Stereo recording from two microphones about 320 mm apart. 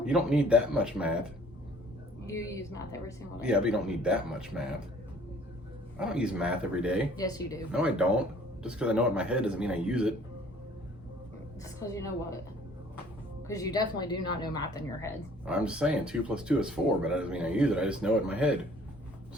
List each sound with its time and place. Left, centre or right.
0.0 s speech: centre
2.2 s speech: centre
3.4 s speech: centre
6.0 s speech: centre
7.2 s speech: centre
7.7 s speech: centre
11.6 s speech: centre
13.5 s speech: centre
15.4 s speech: centre